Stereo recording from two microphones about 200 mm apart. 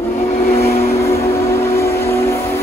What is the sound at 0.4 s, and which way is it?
Vehicle, 50° left (ahead or behind).